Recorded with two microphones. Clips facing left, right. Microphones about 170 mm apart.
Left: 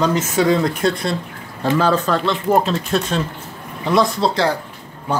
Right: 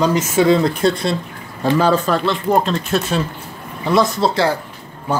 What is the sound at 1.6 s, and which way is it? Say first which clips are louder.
Speech: right 2 dB; 15° right (ahead or behind).